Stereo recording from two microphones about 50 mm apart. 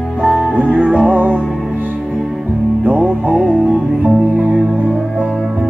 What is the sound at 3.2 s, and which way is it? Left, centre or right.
Music, right.